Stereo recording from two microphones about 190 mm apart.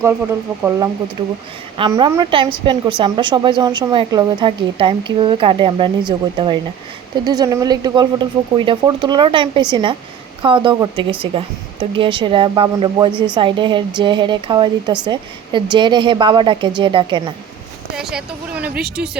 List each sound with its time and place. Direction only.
1.8 s a woman's voice: 25° right (ahead or behind)
17.9 s speech: 5° right (ahead or behind)
18.8 s speech: 55° right (ahead or behind)